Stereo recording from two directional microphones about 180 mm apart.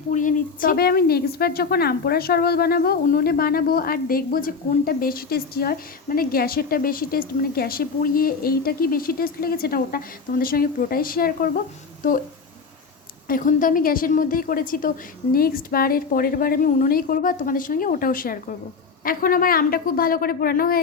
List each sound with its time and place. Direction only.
0.1 s a woman's voice: 45° left (ahead or behind)
13.2 s a woman's voice: 50° left (ahead or behind)